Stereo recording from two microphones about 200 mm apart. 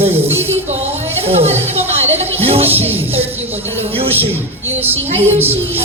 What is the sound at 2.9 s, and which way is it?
Music, 10° right (ahead or behind).